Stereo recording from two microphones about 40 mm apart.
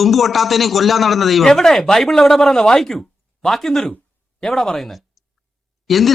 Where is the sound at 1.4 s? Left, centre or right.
Centre.